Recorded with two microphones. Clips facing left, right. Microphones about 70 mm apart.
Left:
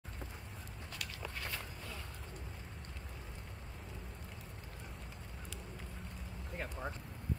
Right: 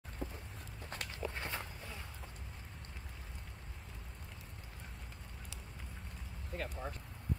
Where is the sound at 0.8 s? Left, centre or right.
Right.